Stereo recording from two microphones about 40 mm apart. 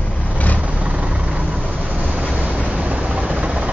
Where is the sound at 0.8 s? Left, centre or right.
Right.